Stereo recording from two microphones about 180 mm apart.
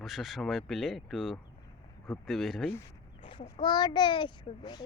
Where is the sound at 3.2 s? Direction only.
30° left (ahead or behind).